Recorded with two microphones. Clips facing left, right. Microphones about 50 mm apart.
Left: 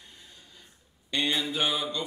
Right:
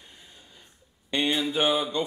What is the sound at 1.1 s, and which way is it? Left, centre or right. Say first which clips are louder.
Speech: right 3 dB; right.